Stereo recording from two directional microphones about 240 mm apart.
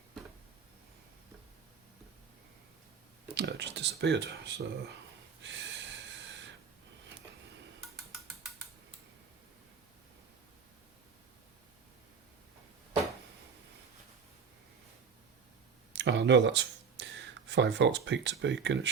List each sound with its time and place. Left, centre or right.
3.3 s speech: right
5.4 s snort: right
15.9 s a sound: right